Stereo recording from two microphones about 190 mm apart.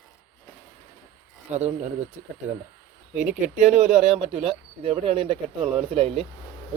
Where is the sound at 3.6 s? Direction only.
35° right (ahead or behind).